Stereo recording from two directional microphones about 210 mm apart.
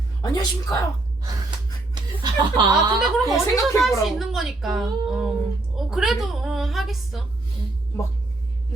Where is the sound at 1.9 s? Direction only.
20° right (ahead or behind).